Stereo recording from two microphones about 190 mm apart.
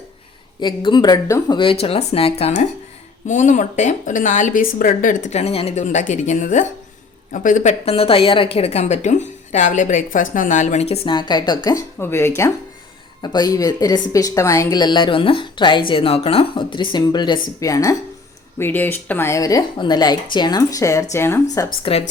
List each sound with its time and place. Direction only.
0.6 s a woman's voice: 25° left (ahead or behind)
21.9 s speech: 25° left (ahead or behind)